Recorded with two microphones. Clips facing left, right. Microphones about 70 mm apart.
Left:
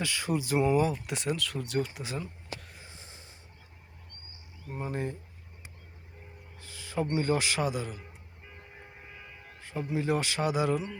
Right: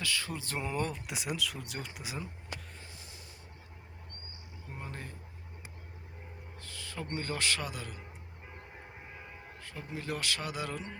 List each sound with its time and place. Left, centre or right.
0.0 s speech: left; by 2.2 s centre
2.8 s a sound: left
4.8 s speech: centre
6.6 s a man's voice: centre
9.6 s speech: left